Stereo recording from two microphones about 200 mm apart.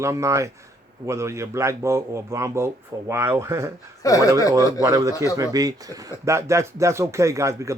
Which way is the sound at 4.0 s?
15° left (ahead or behind).